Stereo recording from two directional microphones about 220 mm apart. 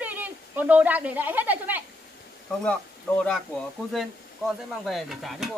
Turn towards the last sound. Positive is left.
turn(degrees=0)  # may be behind; listen again after turning